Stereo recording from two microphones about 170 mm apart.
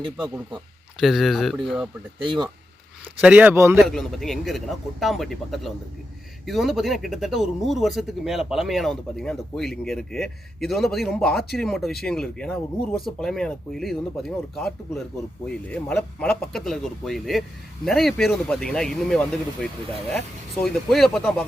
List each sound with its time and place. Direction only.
0.0 s speech: 30° right (ahead or behind)
0.9 s speech: centre (ahead or behind)
2.2 s speech: 25° right (ahead or behind)
3.2 s speech: 5° right (ahead or behind)
3.8 s speech: centre (ahead or behind)